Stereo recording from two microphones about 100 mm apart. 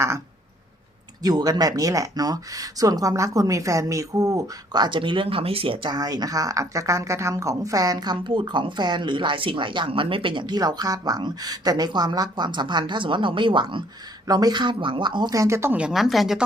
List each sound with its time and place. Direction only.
1.2 s speech: 45° right (ahead or behind); by 5.9 s 65° right (ahead or behind)
5.9 s a woman's voice: 40° right (ahead or behind)
14.3 s a woman's voice: 45° right (ahead or behind)
15.4 s speech: 30° right (ahead or behind)
15.9 s speech: centre (ahead or behind)